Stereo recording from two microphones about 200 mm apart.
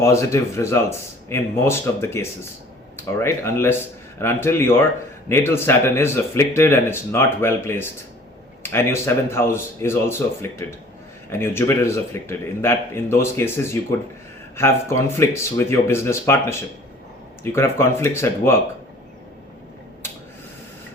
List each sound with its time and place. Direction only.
0.0 s speech: 15° left (ahead or behind)